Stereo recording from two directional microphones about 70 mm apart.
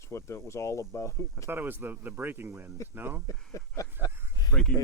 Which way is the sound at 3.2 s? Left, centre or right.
Left.